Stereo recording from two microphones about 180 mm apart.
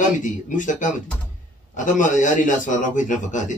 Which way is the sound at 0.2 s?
45° left (ahead or behind).